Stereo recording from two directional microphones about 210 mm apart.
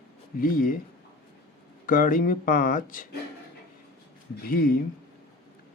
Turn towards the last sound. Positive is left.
turn(degrees=45)  # may be behind; listen again after turning